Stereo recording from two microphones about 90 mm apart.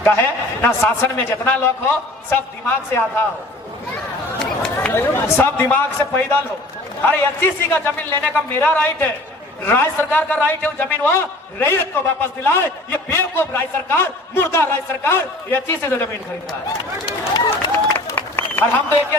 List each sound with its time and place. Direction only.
0.0 s a man's voice: 25° left (ahead or behind)
4.4 s a sound: 5° left (ahead or behind)
4.9 s a man's voice: 25° left (ahead or behind)
17.1 s speech: 55° left (ahead or behind)
17.7 s applause: 25° left (ahead or behind)